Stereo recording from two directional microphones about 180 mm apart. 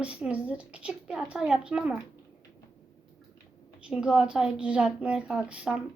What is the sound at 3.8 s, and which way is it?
A woman's voice, 5° right (ahead or behind).